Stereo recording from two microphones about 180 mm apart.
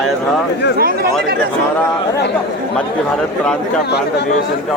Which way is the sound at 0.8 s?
55° right (ahead or behind).